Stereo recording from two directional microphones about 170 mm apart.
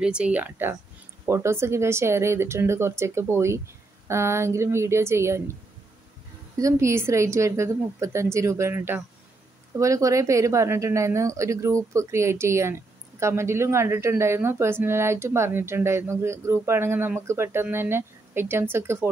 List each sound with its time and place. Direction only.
0.0 s a woman's voice: 5° right (ahead or behind)